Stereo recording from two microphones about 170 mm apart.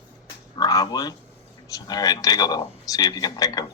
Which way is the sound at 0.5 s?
20° left (ahead or behind).